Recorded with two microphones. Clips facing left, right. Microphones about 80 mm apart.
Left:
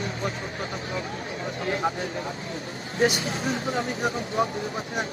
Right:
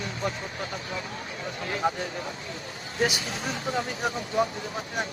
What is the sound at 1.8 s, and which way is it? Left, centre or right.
Speech, centre.